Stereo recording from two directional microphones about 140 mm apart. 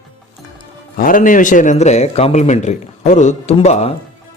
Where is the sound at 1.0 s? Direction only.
80° left; by 3.9 s 50° left (ahead or behind).